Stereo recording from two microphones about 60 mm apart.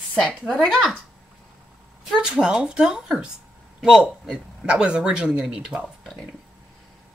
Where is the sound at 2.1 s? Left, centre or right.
Centre.